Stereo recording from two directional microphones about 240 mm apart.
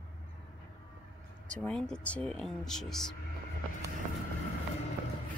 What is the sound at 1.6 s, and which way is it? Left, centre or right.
Speech, centre.